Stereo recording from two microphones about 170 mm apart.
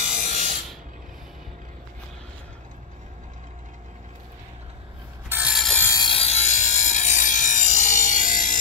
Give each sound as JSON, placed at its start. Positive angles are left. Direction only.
{"t": 0.0, "sound": "ratchet", "side_deg": -45}
{"t": 5.3, "sound": "mechanisms", "side_deg": -5}
{"t": 5.8, "sound": "wood", "side_deg": 15}
{"t": 6.0, "sound": "wood", "side_deg": 35}